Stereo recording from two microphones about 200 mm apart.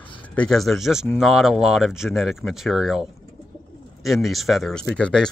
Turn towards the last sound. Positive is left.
turn(degrees=5)  # may be behind; listen again after turning